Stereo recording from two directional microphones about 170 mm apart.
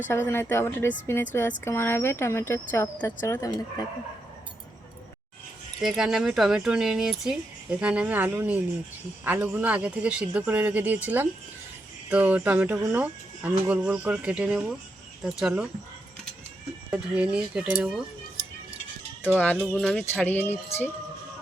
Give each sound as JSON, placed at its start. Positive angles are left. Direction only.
{"t": 0.1, "sound": "speech", "side_deg": 15}
{"t": 5.8, "sound": "speech", "side_deg": 0}
{"t": 16.9, "sound": "speech", "side_deg": -5}
{"t": 19.4, "sound": "speech", "side_deg": 10}